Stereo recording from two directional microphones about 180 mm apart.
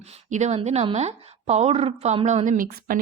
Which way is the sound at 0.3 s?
40° right (ahead or behind).